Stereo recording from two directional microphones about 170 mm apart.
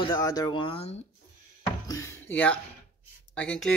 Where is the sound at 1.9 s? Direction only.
15° left (ahead or behind).